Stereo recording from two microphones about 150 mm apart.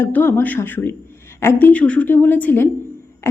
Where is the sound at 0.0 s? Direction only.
15° left (ahead or behind).